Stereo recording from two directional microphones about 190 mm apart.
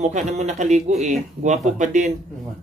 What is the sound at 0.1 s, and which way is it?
Speech, 40° right (ahead or behind).